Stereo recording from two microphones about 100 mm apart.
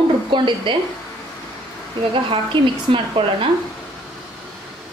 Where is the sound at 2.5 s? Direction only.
55° right (ahead or behind).